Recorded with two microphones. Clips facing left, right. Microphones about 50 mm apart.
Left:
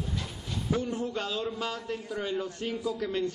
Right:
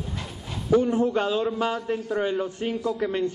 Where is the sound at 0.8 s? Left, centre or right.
Right.